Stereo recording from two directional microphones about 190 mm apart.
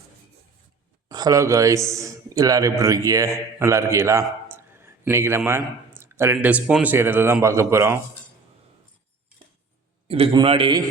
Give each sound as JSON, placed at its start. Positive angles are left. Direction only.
{"t": 1.0, "sound": "a man's voice", "side_deg": -20}
{"t": 10.1, "sound": "a man's voice", "side_deg": -30}